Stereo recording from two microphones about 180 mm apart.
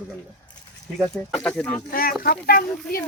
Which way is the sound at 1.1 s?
5° left (ahead or behind).